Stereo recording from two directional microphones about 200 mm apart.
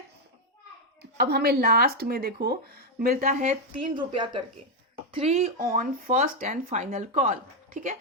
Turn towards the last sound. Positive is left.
turn(degrees=-40)  # may be behind; listen again after turning